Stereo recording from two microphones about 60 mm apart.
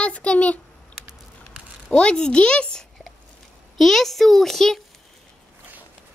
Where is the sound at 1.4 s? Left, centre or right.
Centre.